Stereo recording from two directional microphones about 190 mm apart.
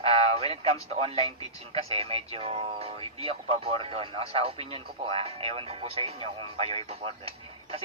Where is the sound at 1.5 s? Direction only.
30° right (ahead or behind).